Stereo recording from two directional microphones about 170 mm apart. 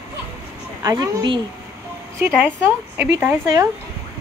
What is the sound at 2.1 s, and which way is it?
A woman's voice, 15° right (ahead or behind).